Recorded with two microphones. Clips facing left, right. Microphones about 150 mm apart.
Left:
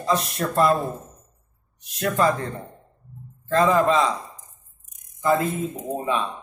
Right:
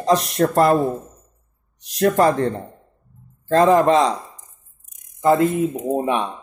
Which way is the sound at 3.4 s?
75° right (ahead or behind).